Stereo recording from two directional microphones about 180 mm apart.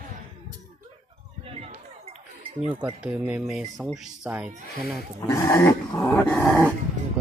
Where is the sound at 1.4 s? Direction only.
35° right (ahead or behind).